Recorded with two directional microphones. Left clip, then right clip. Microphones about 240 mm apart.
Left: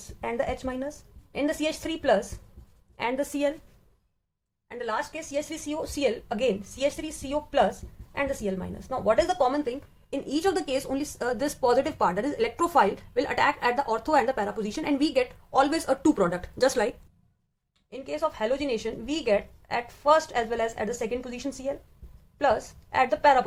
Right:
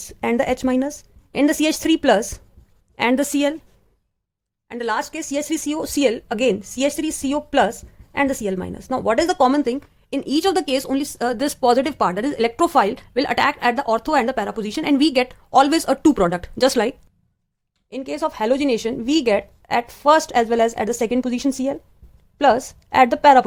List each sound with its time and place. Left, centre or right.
0.0 s a woman's voice: right
4.7 s speech: right
17.9 s a woman's voice: right